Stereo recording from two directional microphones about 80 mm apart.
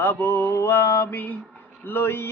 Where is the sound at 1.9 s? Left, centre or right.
Left.